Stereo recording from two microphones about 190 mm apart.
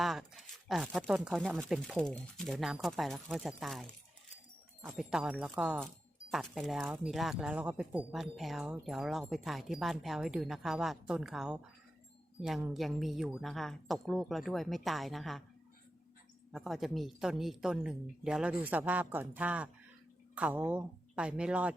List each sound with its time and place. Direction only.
0.0 s speech: centre (ahead or behind)
16.5 s speech: centre (ahead or behind)